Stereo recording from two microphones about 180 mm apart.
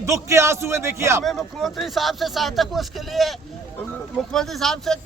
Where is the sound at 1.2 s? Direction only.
5° left (ahead or behind).